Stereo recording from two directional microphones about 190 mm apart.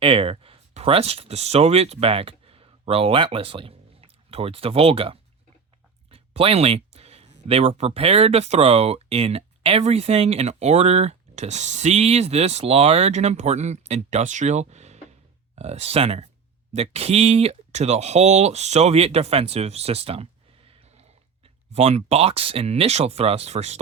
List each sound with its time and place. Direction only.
0.0 s speech: 30° right (ahead or behind)
6.1 s a sound: 30° right (ahead or behind)
7.4 s speech: 35° right (ahead or behind)
21.7 s speech: 35° right (ahead or behind)